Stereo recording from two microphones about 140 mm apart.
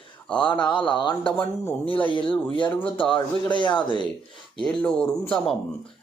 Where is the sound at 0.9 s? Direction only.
35° left (ahead or behind).